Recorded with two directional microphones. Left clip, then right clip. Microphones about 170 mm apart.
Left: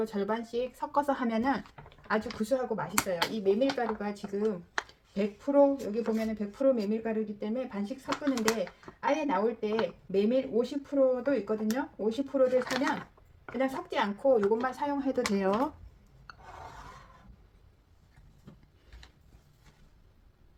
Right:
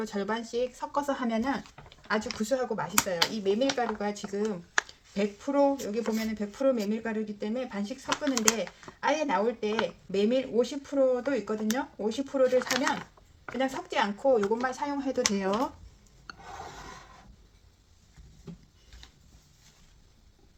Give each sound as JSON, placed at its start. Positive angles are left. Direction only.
{"t": 0.0, "sound": "speech", "side_deg": -5}
{"t": 0.9, "sound": "speech", "side_deg": 15}
{"t": 1.6, "sound": "a sound", "side_deg": 30}
{"t": 2.4, "sound": "speech", "side_deg": -5}